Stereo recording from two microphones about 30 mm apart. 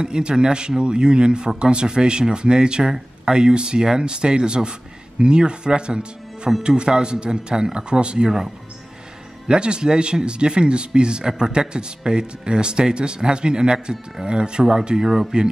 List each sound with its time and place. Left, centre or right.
0.0 s speech: right
9.5 s speech: right
14.6 s speech: centre